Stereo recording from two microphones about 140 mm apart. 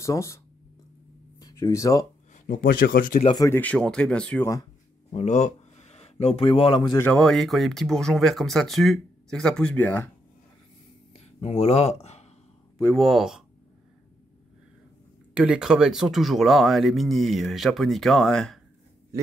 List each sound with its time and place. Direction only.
0.0 s speech: 20° left (ahead or behind)
1.4 s speech: 20° left (ahead or behind)
2.3 s speech: 70° left (ahead or behind); by 3.2 s 85° left
3.4 s speech: 15° left (ahead or behind)
5.1 s speech: 55° left (ahead or behind); by 7.0 s 35° left (ahead or behind)
7.0 s speech: 5° left (ahead or behind)
11.1 s speech: 50° left (ahead or behind)
12.9 s speech: centre (ahead or behind)
15.3 s speech: 5° right (ahead or behind)